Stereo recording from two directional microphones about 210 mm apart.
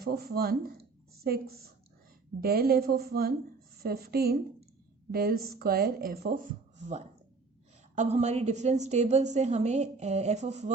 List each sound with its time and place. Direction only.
0.0 s a woman's voice: 50° right (ahead or behind); by 10.7 s 30° right (ahead or behind)